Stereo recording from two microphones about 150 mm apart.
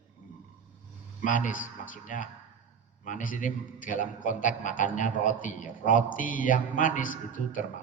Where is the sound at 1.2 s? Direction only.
60° left (ahead or behind).